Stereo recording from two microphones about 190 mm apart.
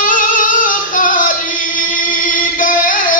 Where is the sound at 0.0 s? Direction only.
45° left (ahead or behind).